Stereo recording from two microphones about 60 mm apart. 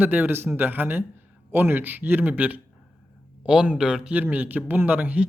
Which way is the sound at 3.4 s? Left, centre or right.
Centre.